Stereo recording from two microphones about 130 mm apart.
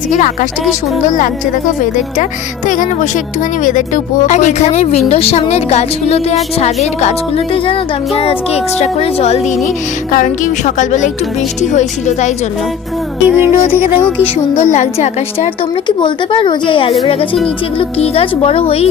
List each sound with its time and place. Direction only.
2.6 s speech: 90° left; by 9.4 s 50° left (ahead or behind)
10.1 s speech: 80° left; by 12.3 s 65° left (ahead or behind)
13.2 s music: 15° right (ahead or behind)
14.6 s speech: 60° left (ahead or behind)
16.0 s speech: 40° left (ahead or behind)